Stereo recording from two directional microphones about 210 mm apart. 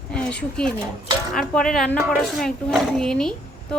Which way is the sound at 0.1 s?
5° left (ahead or behind).